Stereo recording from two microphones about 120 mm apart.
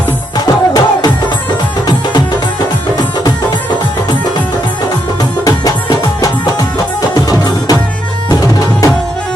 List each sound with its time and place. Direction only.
0.3 s music: 30° left (ahead or behind)
5.5 s music: 30° left (ahead or behind)